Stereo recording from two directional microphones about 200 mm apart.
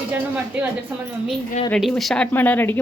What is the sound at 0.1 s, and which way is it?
Speech, 10° right (ahead or behind).